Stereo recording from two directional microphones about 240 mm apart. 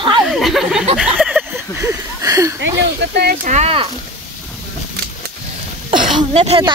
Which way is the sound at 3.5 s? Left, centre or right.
Right.